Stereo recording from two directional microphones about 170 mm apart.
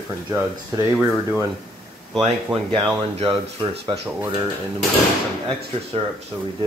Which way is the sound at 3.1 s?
35° right (ahead or behind).